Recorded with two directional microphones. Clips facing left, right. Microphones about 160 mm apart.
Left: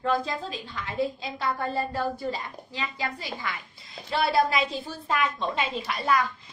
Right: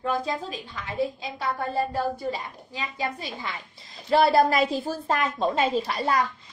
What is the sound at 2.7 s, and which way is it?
Speech, 15° right (ahead or behind).